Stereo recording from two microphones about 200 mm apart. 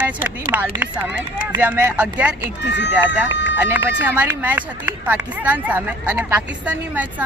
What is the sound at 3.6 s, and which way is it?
Speech, 10° right (ahead or behind).